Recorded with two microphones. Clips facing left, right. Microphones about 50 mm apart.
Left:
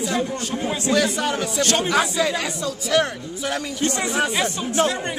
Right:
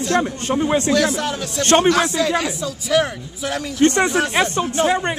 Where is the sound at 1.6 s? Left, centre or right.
Right.